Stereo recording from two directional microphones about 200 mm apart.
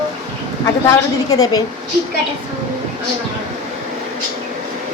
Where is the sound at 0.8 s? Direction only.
15° left (ahead or behind).